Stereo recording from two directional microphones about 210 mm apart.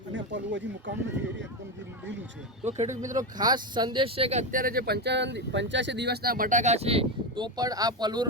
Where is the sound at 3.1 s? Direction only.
20° right (ahead or behind).